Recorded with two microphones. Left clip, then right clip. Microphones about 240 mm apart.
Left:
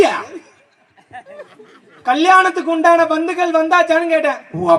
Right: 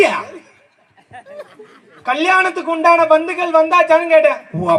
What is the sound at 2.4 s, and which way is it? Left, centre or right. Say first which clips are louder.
A woman's voice: left 1 dB; left.